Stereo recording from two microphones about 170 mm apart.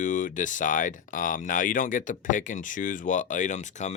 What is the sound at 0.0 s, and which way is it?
Speech, 50° left (ahead or behind).